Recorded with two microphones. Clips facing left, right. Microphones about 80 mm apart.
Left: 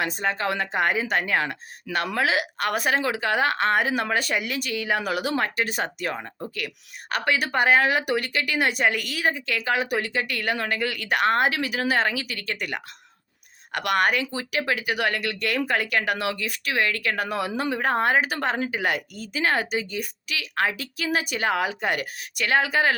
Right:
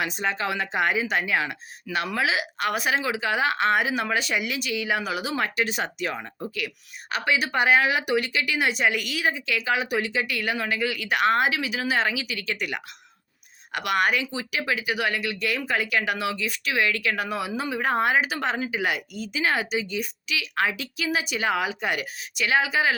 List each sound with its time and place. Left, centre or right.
0.0 s speech: left
5.4 s speech: left